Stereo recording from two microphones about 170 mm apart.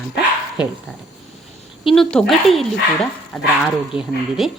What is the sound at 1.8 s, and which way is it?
A woman's voice, centre (ahead or behind).